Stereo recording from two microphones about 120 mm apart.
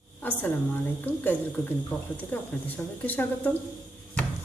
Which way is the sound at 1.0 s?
15° left (ahead or behind).